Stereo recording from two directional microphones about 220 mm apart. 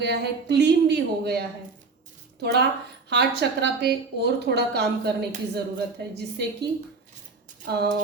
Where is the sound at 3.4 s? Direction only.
50° right (ahead or behind).